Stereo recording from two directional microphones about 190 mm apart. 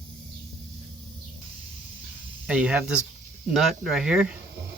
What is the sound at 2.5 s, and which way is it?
Speech, 5° right (ahead or behind).